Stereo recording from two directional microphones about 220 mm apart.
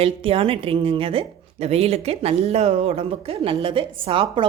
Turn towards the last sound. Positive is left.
turn(degrees=-25)  # may be behind; listen again after turning